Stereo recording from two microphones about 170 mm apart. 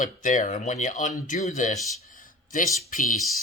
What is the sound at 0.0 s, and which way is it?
Speech, 50° left (ahead or behind).